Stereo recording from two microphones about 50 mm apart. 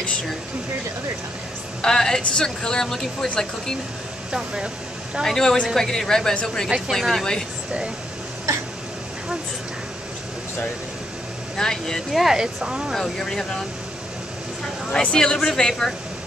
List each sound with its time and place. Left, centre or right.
1.8 s speech: centre
4.3 s speech: centre
5.2 s speech: centre
11.5 s speech: centre
12.1 s speech: centre
12.4 s speech: centre
12.9 s speech: centre
14.9 s speech: left